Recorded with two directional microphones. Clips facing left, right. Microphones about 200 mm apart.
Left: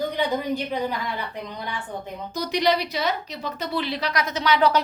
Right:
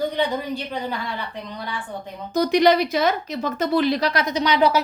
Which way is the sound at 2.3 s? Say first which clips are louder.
Right 6 dB; 50° right (ahead or behind).